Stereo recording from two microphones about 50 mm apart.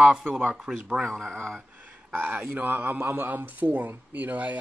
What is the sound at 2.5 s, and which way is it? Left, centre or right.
Speech, right.